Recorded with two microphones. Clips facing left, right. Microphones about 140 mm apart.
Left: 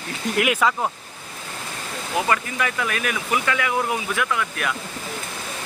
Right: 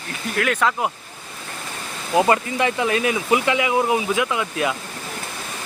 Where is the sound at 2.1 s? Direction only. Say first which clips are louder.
Right 6 dB; 25° right (ahead or behind).